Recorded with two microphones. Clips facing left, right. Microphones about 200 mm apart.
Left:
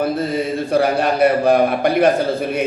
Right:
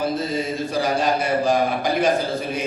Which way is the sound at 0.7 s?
60° left (ahead or behind).